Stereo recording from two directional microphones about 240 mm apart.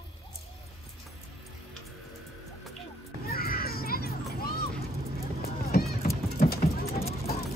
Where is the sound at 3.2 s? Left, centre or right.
Left.